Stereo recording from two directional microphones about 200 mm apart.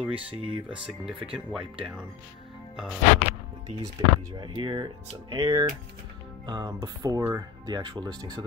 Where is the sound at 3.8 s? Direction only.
20° right (ahead or behind).